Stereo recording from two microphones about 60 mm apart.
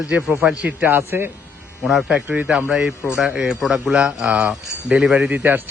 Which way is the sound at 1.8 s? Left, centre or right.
Centre.